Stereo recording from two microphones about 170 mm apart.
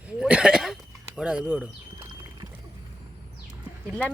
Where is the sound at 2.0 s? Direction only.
25° right (ahead or behind).